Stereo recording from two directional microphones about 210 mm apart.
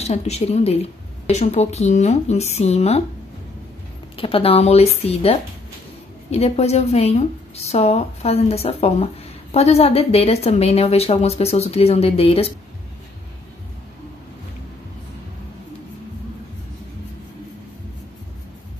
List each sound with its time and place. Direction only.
0.0 s speech: 30° left (ahead or behind)
4.2 s a woman's voice: 25° left (ahead or behind)